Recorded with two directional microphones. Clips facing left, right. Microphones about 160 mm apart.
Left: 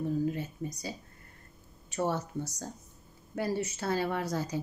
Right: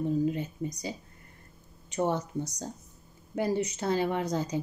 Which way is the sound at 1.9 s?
15° right (ahead or behind).